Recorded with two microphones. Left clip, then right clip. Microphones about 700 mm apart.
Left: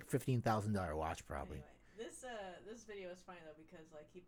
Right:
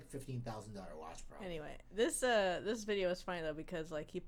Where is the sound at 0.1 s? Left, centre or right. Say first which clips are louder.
Left 10 dB; left.